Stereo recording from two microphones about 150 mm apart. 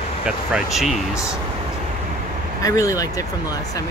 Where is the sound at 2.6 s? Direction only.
20° left (ahead or behind).